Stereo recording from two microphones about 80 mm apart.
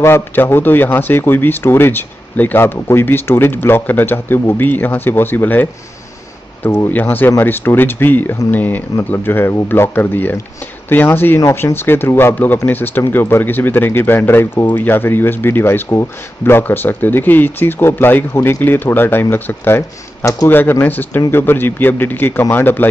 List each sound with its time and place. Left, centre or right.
0.0 s speech: left
6.9 s speech: left